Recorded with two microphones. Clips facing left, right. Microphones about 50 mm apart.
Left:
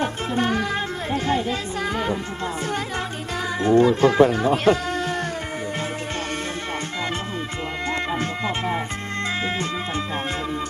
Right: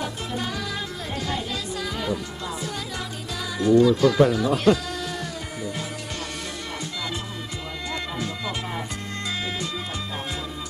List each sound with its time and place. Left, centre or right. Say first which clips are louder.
0.0 s music: left 6 dB; left
3.6 s speech: left 1 dB; left
8.2 s music: left 5 dB; left